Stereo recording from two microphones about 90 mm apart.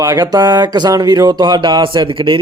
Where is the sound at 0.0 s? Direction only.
45° right (ahead or behind).